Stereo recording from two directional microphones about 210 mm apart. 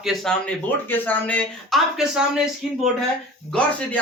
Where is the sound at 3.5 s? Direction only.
5° left (ahead or behind).